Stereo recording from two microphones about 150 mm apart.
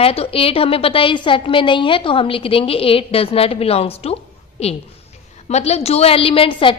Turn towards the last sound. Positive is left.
turn(degrees=35)  # may be behind; listen again after turning